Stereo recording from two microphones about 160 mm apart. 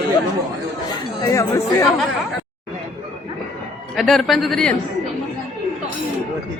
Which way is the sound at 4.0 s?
Centre (ahead or behind).